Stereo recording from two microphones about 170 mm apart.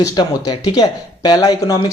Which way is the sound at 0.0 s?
25° left (ahead or behind).